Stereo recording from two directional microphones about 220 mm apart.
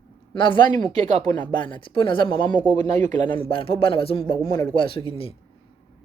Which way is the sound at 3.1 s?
20° left (ahead or behind).